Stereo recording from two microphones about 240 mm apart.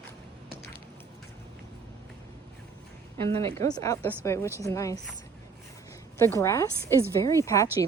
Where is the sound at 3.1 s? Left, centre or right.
Centre.